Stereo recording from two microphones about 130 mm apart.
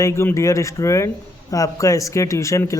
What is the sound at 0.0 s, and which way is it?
Speech, 20° left (ahead or behind).